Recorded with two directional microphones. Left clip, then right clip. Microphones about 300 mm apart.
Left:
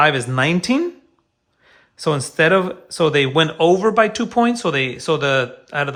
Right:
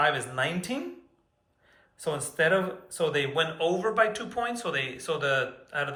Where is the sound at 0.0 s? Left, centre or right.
Centre.